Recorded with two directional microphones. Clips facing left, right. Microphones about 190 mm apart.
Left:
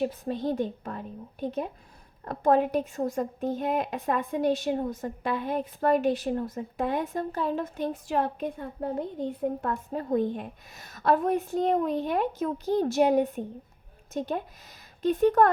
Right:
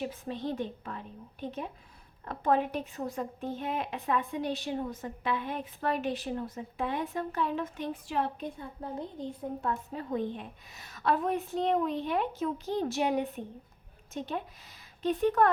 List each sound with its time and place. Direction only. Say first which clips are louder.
0.0 s a woman's voice: left 6 dB; 40° left (ahead or behind)